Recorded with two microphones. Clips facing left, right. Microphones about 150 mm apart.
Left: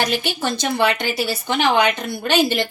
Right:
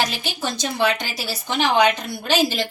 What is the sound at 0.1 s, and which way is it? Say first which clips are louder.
A woman's voice: left 5 dB; 60° left (ahead or behind).